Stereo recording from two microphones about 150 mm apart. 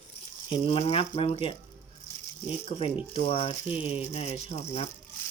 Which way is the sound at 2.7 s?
40° left (ahead or behind).